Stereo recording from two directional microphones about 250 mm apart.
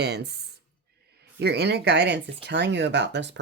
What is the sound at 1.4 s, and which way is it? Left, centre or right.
Speech, right.